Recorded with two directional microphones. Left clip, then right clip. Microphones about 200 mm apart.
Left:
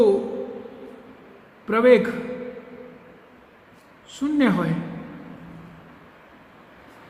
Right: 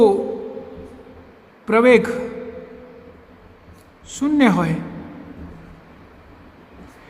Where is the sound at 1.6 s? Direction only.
50° right (ahead or behind).